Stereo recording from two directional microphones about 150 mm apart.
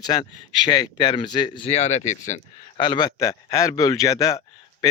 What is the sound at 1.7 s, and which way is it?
Speech, 50° left (ahead or behind).